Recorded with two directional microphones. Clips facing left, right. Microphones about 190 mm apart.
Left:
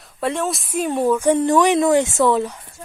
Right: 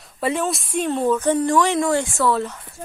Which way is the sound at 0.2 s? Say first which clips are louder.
Even; centre (ahead or behind).